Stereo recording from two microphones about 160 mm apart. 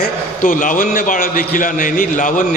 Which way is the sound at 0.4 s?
55° left (ahead or behind).